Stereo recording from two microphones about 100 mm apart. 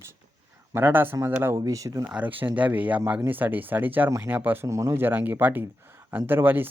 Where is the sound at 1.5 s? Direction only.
35° right (ahead or behind).